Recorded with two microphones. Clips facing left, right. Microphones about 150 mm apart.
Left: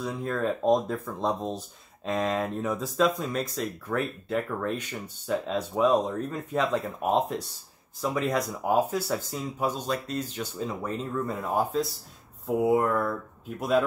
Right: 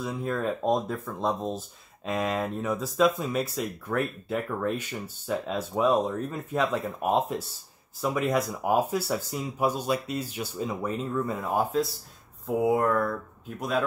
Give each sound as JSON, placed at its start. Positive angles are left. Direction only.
{"t": 0.0, "sound": "speech", "side_deg": -5}